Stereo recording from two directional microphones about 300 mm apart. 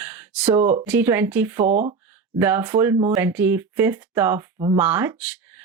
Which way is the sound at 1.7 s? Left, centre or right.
Right.